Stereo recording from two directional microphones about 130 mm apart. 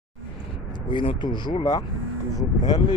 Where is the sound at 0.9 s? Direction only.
35° left (ahead or behind).